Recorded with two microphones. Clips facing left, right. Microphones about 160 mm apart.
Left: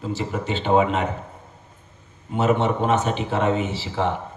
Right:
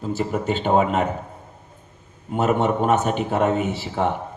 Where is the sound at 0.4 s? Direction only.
45° right (ahead or behind).